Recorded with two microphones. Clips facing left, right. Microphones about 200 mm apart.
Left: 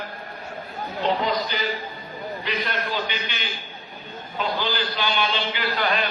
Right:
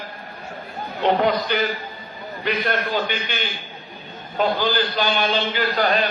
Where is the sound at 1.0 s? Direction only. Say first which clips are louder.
Right 5 dB; 60° right (ahead or behind); by 6.1 s 40° right (ahead or behind).